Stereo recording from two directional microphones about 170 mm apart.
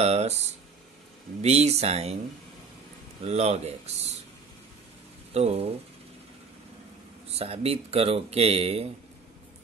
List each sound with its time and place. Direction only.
0.0 s a sound: 40° right (ahead or behind)
1.4 s speech: 40° right (ahead or behind)
3.3 s speech: 40° right (ahead or behind)
5.3 s speech: 35° right (ahead or behind)
7.2 s speech: 35° right (ahead or behind)